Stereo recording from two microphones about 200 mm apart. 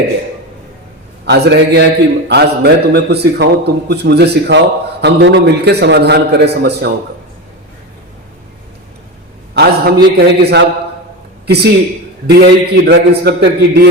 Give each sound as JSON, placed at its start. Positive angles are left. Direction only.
{"t": 1.2, "sound": "a man's voice", "side_deg": -55}
{"t": 9.6, "sound": "a man's voice", "side_deg": -55}